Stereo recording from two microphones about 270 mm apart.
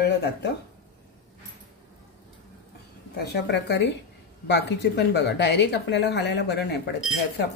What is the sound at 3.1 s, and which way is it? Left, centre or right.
Speech, left.